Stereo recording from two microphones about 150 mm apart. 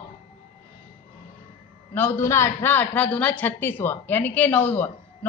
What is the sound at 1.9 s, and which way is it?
A woman's voice, 15° left (ahead or behind).